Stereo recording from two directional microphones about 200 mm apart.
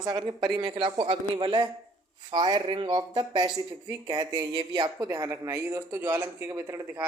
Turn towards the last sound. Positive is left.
turn(degrees=-15)  # may be behind; listen again after turning